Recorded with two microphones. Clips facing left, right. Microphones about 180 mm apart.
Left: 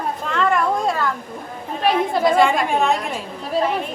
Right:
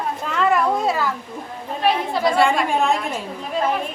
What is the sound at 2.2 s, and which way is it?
Speech, centre (ahead or behind).